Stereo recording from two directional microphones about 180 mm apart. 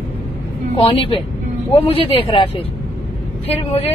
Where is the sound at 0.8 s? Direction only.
30° left (ahead or behind).